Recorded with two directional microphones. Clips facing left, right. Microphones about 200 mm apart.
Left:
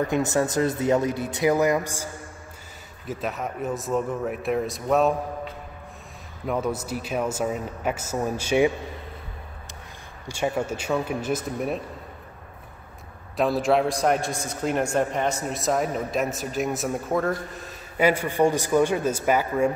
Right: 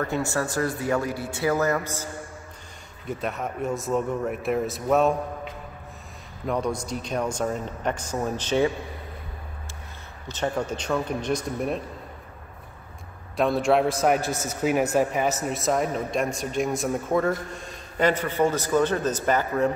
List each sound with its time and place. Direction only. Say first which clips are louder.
0.0 s a man's voice: left 4 dB; 20° left (ahead or behind)
3.1 s a man's voice: even; centre (ahead or behind)
6.4 s a man's voice: even; 5° left (ahead or behind)
10.2 s a man's voice: left 1 dB; 10° left (ahead or behind)
13.4 s a man's voice: even; centre (ahead or behind)